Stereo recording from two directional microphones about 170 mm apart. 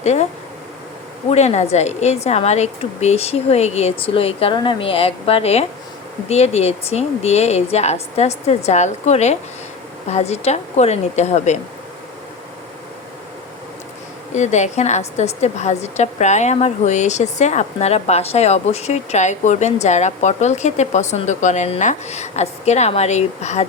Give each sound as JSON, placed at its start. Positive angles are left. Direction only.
{"t": 0.0, "sound": "speech", "side_deg": 40}
{"t": 1.3, "sound": "a woman's voice", "side_deg": 40}
{"t": 14.3, "sound": "a woman's voice", "side_deg": 45}